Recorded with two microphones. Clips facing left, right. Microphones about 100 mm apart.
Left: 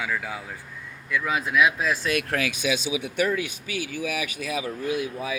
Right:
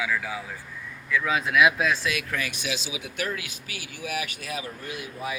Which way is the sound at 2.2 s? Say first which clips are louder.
Left 4 dB; 75° left (ahead or behind).